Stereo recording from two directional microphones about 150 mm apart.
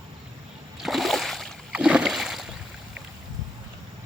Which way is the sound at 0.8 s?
Centre (ahead or behind).